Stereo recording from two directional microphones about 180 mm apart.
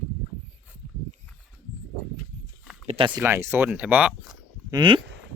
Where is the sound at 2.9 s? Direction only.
30° right (ahead or behind).